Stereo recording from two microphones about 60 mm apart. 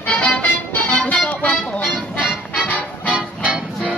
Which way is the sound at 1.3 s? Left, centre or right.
Left.